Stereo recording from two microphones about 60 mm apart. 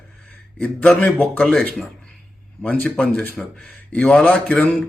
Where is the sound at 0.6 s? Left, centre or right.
Left.